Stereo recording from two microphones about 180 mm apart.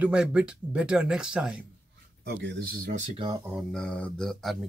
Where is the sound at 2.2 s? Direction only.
75° right (ahead or behind).